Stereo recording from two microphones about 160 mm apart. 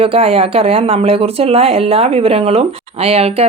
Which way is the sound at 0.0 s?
35° right (ahead or behind).